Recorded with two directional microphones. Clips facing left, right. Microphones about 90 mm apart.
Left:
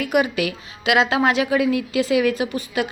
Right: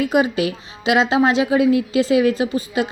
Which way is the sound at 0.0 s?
25° right (ahead or behind).